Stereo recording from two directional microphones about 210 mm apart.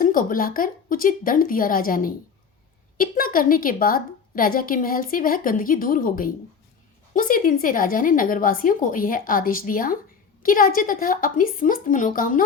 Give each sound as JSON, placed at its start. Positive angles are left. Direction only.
{"t": 0.0, "sound": "a woman's voice", "side_deg": 40}